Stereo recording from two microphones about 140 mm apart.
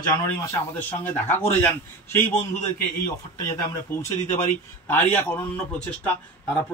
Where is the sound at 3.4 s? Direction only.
20° left (ahead or behind).